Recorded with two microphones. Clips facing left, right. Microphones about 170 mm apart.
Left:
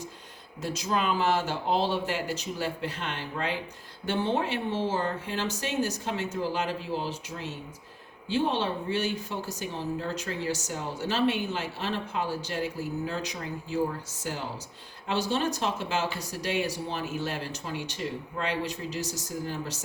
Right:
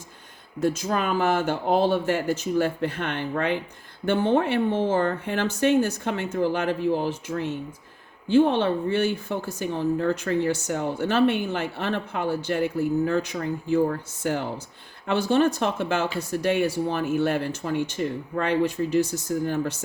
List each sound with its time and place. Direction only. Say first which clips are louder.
0.6 s a woman's voice: right 5 dB; 50° right (ahead or behind)